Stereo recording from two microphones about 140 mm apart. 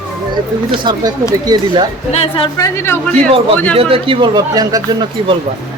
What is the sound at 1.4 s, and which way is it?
Speech, 30° right (ahead or behind).